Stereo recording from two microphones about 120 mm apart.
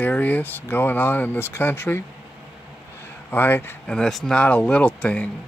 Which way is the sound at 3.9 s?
5° left (ahead or behind).